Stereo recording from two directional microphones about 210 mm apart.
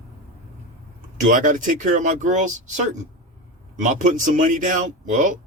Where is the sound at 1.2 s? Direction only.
40° right (ahead or behind).